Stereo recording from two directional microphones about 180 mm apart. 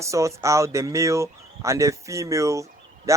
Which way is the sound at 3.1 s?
15° right (ahead or behind).